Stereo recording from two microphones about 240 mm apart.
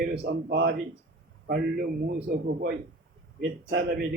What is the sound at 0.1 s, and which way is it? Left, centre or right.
A man's voice, right.